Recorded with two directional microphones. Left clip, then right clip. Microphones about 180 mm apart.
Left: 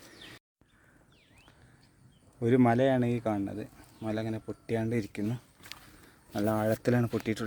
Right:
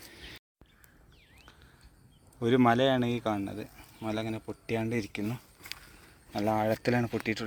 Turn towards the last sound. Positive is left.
turn(degrees=20)  # may be behind; listen again after turning